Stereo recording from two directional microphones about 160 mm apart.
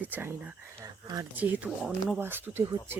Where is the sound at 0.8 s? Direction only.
25° right (ahead or behind).